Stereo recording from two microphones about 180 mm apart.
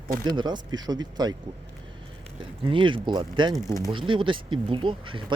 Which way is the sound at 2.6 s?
30° right (ahead or behind).